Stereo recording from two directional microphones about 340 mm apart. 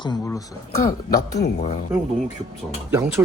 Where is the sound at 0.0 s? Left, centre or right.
Centre.